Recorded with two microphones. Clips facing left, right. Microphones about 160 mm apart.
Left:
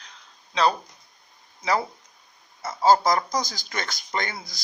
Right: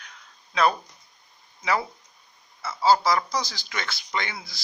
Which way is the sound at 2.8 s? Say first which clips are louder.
Left 2 dB; 45° left (ahead or behind).